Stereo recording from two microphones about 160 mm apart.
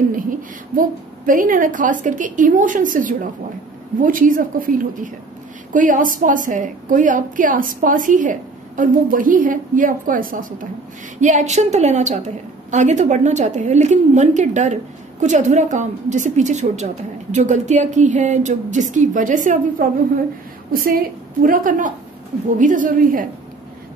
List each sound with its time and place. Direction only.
0.1 s a woman's voice: 60° right (ahead or behind)
21.4 s a woman's voice: 60° right (ahead or behind)